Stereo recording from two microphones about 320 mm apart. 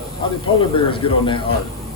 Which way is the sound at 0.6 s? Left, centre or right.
Centre.